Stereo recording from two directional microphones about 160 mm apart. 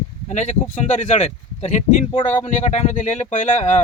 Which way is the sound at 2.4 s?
45° left (ahead or behind).